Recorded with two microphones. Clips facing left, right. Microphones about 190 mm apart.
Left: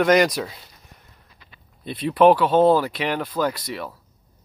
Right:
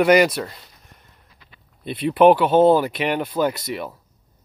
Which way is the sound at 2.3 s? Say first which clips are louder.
Right 2 dB; 5° right (ahead or behind).